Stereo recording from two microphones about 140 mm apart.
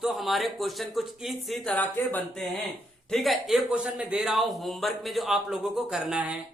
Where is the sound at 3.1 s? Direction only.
Centre (ahead or behind).